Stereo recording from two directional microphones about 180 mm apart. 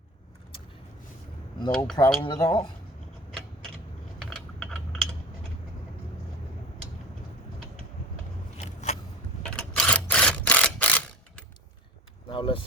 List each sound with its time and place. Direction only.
1.7 s speech: 5° left (ahead or behind)
2.2 s speech: 20° left (ahead or behind)
4.3 s typing: 5° left (ahead or behind)
8.5 s a sound: 40° left (ahead or behind)
9.6 s camera: 5° left (ahead or behind)
12.3 s vehicle: 30° left (ahead or behind)